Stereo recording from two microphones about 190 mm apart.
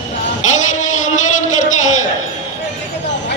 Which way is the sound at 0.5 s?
40° left (ahead or behind).